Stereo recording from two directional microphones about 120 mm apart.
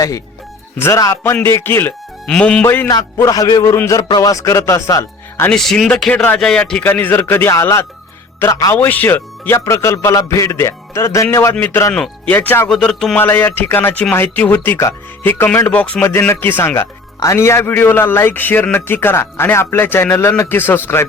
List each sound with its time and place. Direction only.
0.8 s a man's voice: 25° left (ahead or behind)
2.2 s speech: 5° left (ahead or behind)
2.6 s a man's voice: 25° left (ahead or behind)
5.5 s a man's voice: 5° left (ahead or behind); by 11.9 s 20° left (ahead or behind)
11.9 s speech: 5° left (ahead or behind)
12.3 s speech: 15° left (ahead or behind)
12.6 s speech: 5° left (ahead or behind)
13.1 s speech: 20° left (ahead or behind)
16.0 s a man's voice: 20° left (ahead or behind)